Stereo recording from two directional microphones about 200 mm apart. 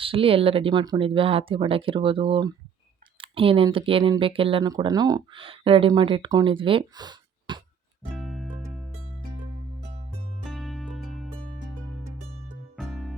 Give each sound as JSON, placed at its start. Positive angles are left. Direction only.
{"t": 0.0, "sound": "speech", "side_deg": -25}
{"t": 8.1, "sound": "music", "side_deg": 0}
{"t": 10.4, "sound": "music", "side_deg": 0}
{"t": 12.7, "sound": "music", "side_deg": 0}